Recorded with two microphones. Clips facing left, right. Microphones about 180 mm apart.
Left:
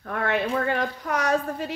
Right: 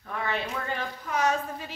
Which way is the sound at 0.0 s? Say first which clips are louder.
Left 6 dB; 60° left (ahead or behind).